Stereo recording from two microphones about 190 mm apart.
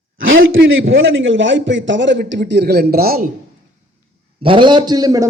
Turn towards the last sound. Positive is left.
turn(degrees=-20)  # may be behind; listen again after turning